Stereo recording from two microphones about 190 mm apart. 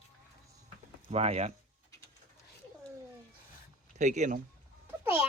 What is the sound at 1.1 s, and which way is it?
Speech, 35° right (ahead or behind).